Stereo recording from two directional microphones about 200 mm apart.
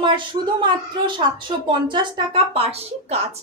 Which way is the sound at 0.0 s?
25° right (ahead or behind).